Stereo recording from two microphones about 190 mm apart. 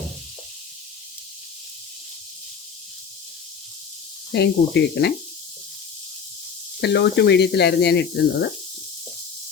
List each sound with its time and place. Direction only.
4.3 s speech: 65° left (ahead or behind)
6.8 s speech: 65° left (ahead or behind)